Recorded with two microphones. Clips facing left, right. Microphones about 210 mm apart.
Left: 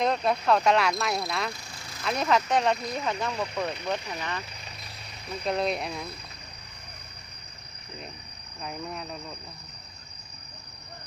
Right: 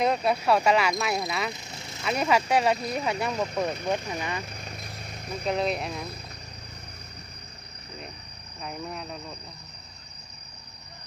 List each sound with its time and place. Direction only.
0.0 s speech: 5° right (ahead or behind)
1.3 s speech: 5° right (ahead or behind)
1.5 s vehicle: 20° right (ahead or behind)
2.0 s speech: 5° right (ahead or behind)
4.6 s vehicle: 50° right (ahead or behind)
5.5 s speech: centre (ahead or behind)
8.6 s speech: centre (ahead or behind)